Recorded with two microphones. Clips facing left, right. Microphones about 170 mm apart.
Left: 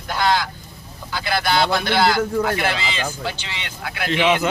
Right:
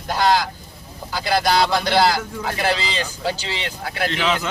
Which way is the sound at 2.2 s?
55° left (ahead or behind).